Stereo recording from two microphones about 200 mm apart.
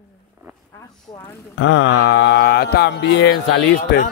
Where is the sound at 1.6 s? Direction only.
70° left (ahead or behind).